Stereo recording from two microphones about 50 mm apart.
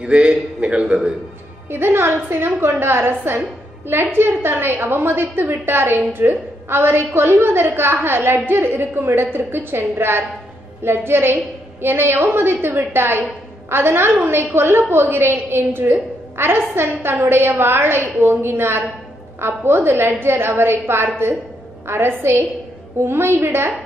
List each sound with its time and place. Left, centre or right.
0.0 s a man's voice: right
1.7 s a woman's voice: right